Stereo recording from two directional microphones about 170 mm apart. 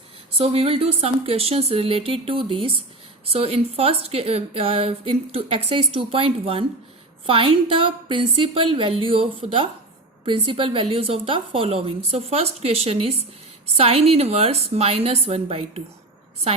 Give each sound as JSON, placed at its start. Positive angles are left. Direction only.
{"t": 0.3, "sound": "a woman's voice", "side_deg": -35}